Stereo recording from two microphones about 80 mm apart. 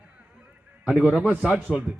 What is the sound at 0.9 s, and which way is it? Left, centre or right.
Speech, centre.